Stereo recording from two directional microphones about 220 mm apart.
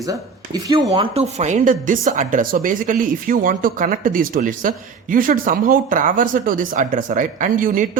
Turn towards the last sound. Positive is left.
turn(degrees=-40)  # may be behind; listen again after turning